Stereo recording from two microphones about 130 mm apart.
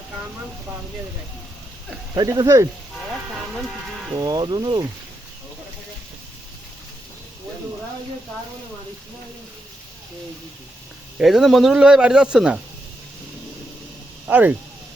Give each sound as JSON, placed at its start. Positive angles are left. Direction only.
{"t": 2.1, "sound": "speech", "side_deg": -30}
{"t": 4.1, "sound": "speech", "side_deg": -30}
{"t": 11.2, "sound": "speech", "side_deg": 0}
{"t": 14.3, "sound": "speech", "side_deg": -15}